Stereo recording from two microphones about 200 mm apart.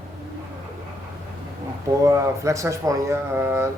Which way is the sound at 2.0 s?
15° right (ahead or behind).